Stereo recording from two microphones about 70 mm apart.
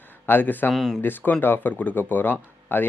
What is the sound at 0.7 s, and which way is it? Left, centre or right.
Speech, centre.